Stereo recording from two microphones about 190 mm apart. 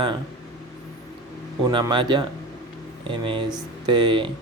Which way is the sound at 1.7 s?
25° right (ahead or behind).